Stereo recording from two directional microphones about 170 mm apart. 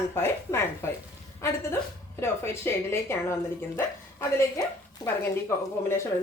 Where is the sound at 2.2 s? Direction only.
15° left (ahead or behind).